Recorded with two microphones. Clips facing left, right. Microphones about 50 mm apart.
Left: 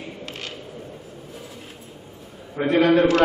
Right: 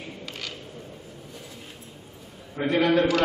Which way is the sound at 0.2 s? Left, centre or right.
Left.